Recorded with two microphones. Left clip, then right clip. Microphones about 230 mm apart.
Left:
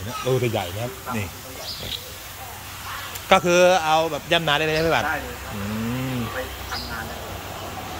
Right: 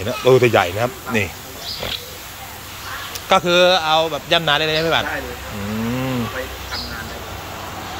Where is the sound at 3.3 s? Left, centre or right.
Centre.